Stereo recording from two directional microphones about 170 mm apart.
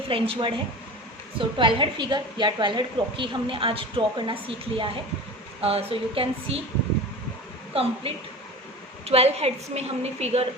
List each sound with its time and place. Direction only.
0.1 s a woman's voice: 30° right (ahead or behind)
7.7 s a woman's voice: 35° right (ahead or behind)